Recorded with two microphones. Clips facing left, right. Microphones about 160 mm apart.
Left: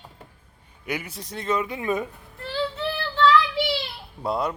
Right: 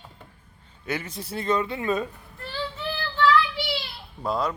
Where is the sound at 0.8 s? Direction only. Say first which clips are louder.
Even; 15° left (ahead or behind).